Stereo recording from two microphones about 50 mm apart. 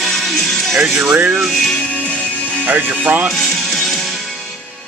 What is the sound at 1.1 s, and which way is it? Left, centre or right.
Speech, right.